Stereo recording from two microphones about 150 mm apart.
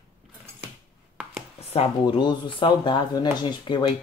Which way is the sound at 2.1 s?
30° left (ahead or behind).